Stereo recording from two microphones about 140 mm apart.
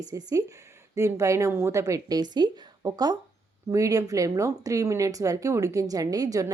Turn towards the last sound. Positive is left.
turn(degrees=-25)  # may be behind; listen again after turning